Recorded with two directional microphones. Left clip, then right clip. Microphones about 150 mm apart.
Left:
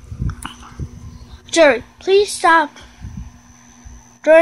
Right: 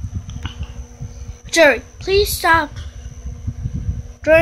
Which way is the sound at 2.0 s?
20° left (ahead or behind).